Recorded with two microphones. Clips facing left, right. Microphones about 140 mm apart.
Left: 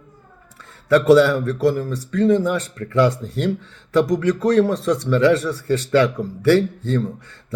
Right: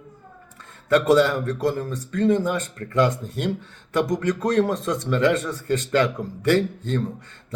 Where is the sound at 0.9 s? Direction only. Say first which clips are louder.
Left 4 dB; 20° right (ahead or behind).